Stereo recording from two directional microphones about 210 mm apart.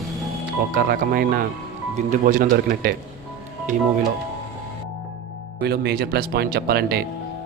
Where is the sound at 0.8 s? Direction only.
45° right (ahead or behind).